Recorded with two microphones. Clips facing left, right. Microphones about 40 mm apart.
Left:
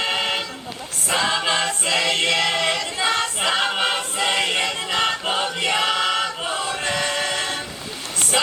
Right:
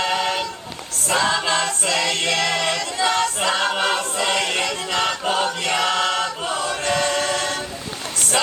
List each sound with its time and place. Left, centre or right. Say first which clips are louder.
0.0 s vehicle: right 1 dB; centre
1.0 s choir: right 1 dB; centre